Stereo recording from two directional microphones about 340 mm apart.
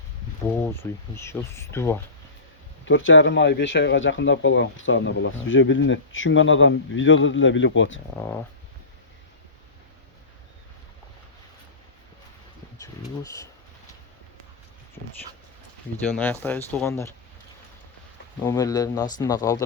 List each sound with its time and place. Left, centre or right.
0.4 s speech: centre
2.8 s speech: left
12.8 s a sound: centre
16.1 s speech: centre
18.3 s speech: centre